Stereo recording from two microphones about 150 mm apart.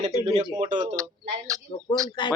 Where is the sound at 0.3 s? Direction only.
45° right (ahead or behind).